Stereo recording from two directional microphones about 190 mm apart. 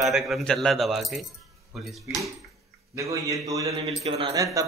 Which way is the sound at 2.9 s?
15° right (ahead or behind).